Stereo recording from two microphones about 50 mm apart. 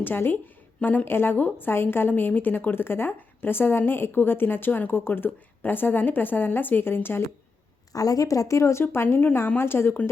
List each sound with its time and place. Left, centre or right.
0.0 s a woman's voice: left
1.0 s a woman's voice: left
8.4 s speech: left
8.8 s a woman's voice: left